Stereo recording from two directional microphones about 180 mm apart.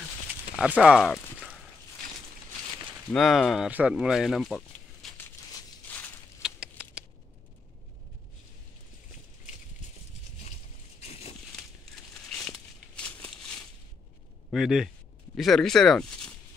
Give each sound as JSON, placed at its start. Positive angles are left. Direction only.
{"t": 0.6, "sound": "speech", "side_deg": -5}
{"t": 3.1, "sound": "speech", "side_deg": 0}
{"t": 5.9, "sound": "walk", "side_deg": 10}
{"t": 6.4, "sound": "a sound", "side_deg": -5}
{"t": 11.0, "sound": "a sound", "side_deg": 35}
{"t": 11.5, "sound": "crumpling", "side_deg": 5}
{"t": 14.5, "sound": "a man's voice", "side_deg": 0}